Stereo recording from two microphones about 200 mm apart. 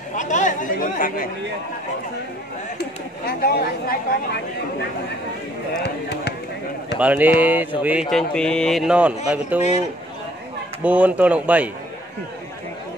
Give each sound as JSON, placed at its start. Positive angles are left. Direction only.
{"t": 0.1, "sound": "speech", "side_deg": 40}
{"t": 3.3, "sound": "speech", "side_deg": 50}
{"t": 5.7, "sound": "speech", "side_deg": 55}
{"t": 7.0, "sound": "speech", "side_deg": -5}
{"t": 9.6, "sound": "speech", "side_deg": 35}
{"t": 10.8, "sound": "speech", "side_deg": -5}